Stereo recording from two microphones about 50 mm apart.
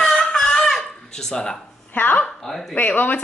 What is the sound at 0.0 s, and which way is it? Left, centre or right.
Music, centre.